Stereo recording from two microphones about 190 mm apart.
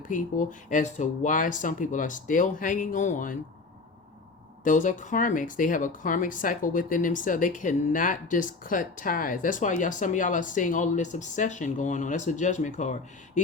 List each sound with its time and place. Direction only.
0.1 s a woman's voice: 45° left (ahead or behind)
4.6 s a woman's voice: 40° left (ahead or behind)